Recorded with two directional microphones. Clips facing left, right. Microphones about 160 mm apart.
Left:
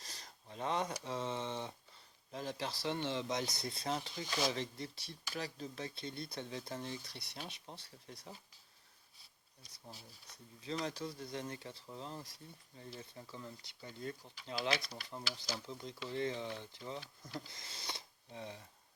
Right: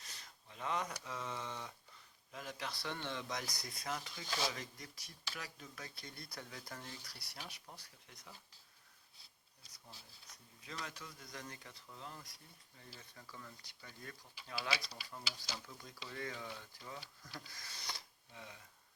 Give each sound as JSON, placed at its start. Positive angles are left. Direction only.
{"t": 0.0, "sound": "a sound", "side_deg": 35}
{"t": 2.3, "sound": "speech", "side_deg": 30}
{"t": 10.6, "sound": "speech", "side_deg": 30}